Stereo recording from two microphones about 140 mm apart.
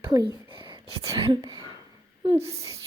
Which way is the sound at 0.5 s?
35° right (ahead or behind).